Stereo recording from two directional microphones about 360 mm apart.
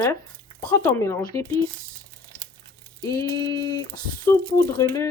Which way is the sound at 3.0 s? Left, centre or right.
Centre.